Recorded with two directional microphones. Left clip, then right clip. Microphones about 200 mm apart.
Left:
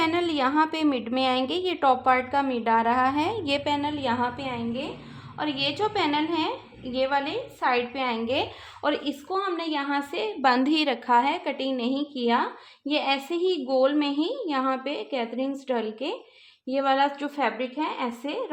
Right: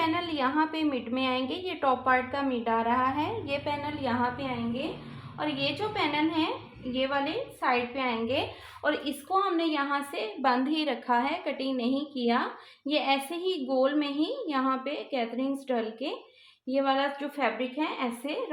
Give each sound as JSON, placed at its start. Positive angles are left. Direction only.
{"t": 0.0, "sound": "a woman's voice", "side_deg": 55}